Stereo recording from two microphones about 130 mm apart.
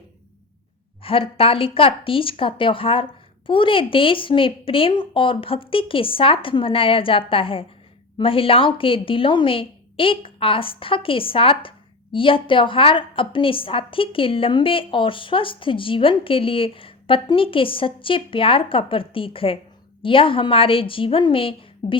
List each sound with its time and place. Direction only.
1.0 s a woman's voice: 45° left (ahead or behind)